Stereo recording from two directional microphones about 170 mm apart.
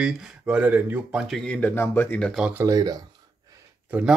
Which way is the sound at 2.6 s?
20° right (ahead or behind).